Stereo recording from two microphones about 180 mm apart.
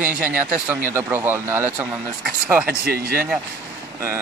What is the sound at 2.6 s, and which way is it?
Speech, 60° right (ahead or behind).